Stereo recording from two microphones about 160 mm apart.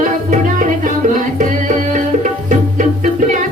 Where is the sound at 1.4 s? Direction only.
50° right (ahead or behind).